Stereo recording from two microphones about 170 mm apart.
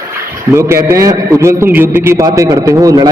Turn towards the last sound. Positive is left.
turn(degrees=-20)  # may be behind; listen again after turning